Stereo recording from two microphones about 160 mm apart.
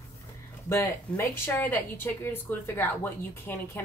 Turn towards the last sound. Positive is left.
turn(degrees=15)  # may be behind; listen again after turning